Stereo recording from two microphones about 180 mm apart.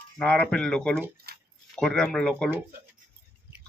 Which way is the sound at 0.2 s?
5° left (ahead or behind).